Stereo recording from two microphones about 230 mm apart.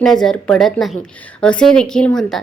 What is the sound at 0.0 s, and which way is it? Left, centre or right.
A woman's voice, centre.